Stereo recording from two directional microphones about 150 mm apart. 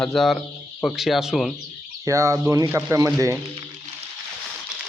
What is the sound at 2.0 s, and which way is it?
Speech, 20° right (ahead or behind).